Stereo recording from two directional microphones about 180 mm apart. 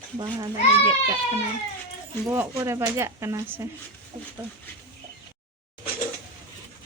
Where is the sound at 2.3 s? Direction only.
15° right (ahead or behind).